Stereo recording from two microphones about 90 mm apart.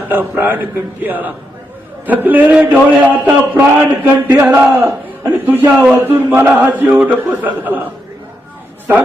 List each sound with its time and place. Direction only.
0.1 s a man's voice: 20° right (ahead or behind)